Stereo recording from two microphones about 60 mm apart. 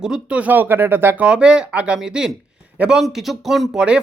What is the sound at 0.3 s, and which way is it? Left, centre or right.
Speech, right.